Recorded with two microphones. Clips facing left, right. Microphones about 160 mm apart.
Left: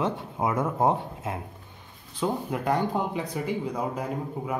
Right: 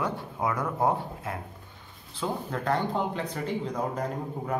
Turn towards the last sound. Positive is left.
turn(degrees=10)  # may be behind; listen again after turning